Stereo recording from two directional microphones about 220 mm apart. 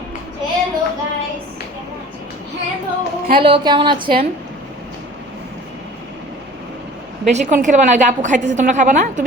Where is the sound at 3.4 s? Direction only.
25° right (ahead or behind).